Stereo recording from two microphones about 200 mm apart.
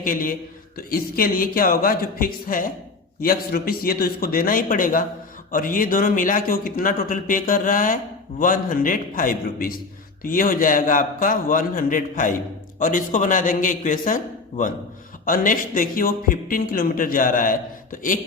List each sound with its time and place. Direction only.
0.0 s a man's voice: 45° left (ahead or behind)